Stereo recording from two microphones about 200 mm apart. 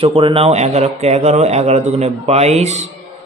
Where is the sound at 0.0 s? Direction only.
25° right (ahead or behind).